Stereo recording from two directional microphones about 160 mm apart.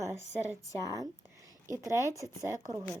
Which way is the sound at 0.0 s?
15° right (ahead or behind).